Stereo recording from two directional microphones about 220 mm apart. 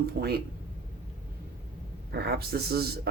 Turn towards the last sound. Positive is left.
turn(degrees=-45)  # may be behind; listen again after turning